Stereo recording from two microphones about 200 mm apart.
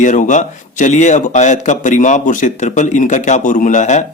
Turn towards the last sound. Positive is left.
turn(degrees=35)  # may be behind; listen again after turning